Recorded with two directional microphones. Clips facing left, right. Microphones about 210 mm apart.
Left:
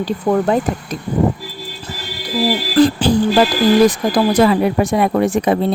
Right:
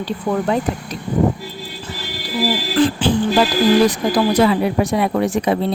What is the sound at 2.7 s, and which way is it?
Music, 40° left (ahead or behind).